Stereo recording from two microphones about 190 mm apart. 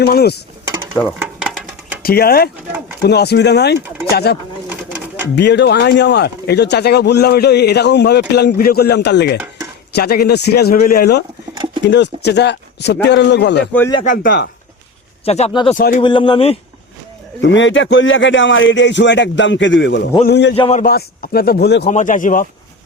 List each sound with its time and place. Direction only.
0.0 s speech: 55° left (ahead or behind)
1.2 s a sound: 5° right (ahead or behind)
2.0 s speech: 55° left (ahead or behind)
11.5 s a sound: 20° right (ahead or behind)
11.8 s speech: 65° left (ahead or behind)
14.0 s speech: 45° left (ahead or behind)
15.2 s speech: 30° left (ahead or behind)
17.4 s a man's voice: 75° left (ahead or behind)
20.6 s speech: 30° left (ahead or behind)
20.8 s speech: 50° left (ahead or behind)
21.8 s speech: 40° left (ahead or behind)